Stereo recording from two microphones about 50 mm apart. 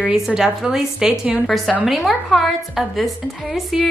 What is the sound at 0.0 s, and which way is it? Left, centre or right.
A woman's voice, centre.